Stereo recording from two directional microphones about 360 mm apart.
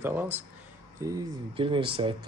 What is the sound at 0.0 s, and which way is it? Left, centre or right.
Speech, centre.